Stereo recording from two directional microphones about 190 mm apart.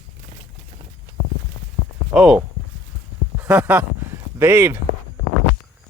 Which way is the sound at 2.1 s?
5° right (ahead or behind).